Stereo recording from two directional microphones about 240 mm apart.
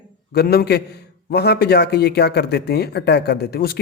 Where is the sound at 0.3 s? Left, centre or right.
Left.